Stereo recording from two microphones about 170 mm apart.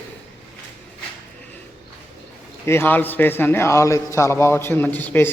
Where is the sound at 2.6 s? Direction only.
10° left (ahead or behind).